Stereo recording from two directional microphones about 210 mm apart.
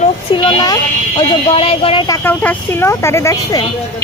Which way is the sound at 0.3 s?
20° left (ahead or behind).